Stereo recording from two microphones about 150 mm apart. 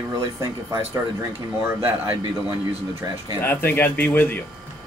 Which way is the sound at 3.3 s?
15° left (ahead or behind).